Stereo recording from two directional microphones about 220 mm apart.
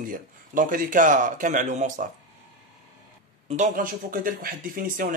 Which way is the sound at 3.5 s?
35° right (ahead or behind).